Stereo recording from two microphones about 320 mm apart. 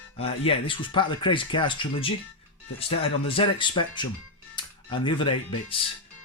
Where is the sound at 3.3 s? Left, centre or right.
Centre.